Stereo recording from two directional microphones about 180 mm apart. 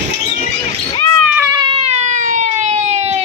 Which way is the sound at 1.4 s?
25° right (ahead or behind).